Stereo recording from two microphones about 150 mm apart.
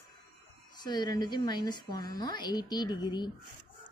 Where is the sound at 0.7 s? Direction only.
25° left (ahead or behind).